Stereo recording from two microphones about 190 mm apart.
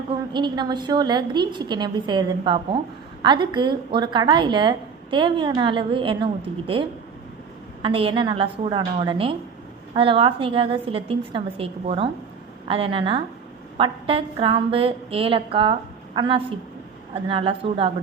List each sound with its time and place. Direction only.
0.3 s a woman's voice: 25° right (ahead or behind)
7.8 s a woman's voice: 30° right (ahead or behind)